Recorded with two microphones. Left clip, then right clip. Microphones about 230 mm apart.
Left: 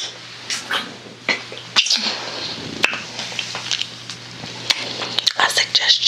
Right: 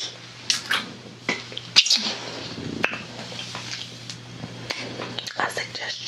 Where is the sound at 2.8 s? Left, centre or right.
Centre.